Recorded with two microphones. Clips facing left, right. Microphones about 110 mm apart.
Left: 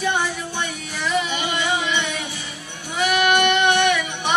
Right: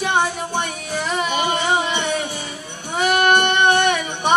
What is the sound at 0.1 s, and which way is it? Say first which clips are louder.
Music: right 4 dB; 45° right (ahead or behind).